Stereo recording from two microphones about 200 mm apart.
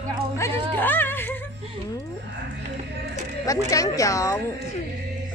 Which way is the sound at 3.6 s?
15° left (ahead or behind).